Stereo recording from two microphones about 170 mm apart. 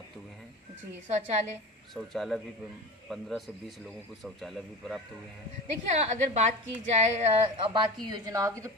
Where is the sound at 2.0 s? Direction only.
Centre (ahead or behind).